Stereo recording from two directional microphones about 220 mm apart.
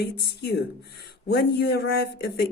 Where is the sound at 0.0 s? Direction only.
45° left (ahead or behind).